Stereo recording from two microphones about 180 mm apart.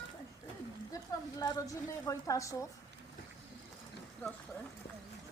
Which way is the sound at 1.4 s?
20° left (ahead or behind).